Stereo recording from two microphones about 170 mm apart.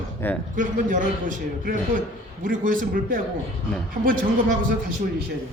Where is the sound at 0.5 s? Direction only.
50° right (ahead or behind).